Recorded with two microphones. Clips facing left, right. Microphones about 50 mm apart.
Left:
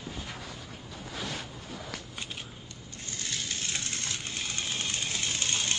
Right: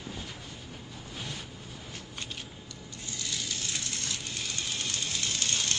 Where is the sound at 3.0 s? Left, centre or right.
Left.